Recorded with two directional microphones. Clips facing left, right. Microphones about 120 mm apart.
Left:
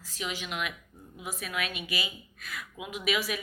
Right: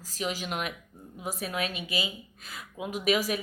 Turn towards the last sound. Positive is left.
turn(degrees=-40)  # may be behind; listen again after turning